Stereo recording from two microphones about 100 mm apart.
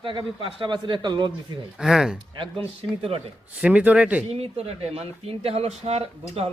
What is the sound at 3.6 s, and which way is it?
Speech, 15° right (ahead or behind).